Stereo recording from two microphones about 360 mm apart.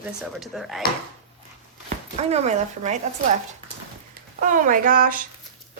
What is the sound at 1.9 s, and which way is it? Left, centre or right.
Speech, centre.